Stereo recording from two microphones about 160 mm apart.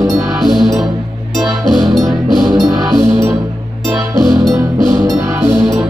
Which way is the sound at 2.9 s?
20° right (ahead or behind).